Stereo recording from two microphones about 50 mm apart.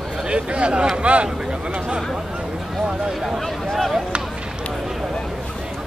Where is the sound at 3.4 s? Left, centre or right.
Centre.